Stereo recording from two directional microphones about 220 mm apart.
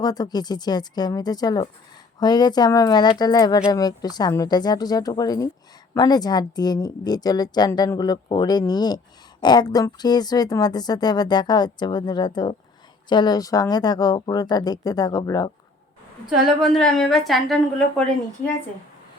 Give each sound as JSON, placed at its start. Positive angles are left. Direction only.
{"t": 0.0, "sound": "a woman's voice", "side_deg": 15}
{"t": 16.6, "sound": "a woman's voice", "side_deg": 0}